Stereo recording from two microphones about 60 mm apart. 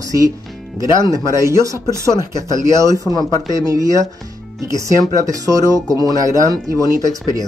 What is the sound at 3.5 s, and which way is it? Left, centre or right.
Speech, right.